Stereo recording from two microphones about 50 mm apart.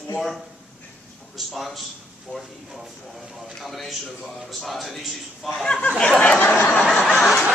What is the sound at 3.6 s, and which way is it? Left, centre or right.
A man's voice, centre.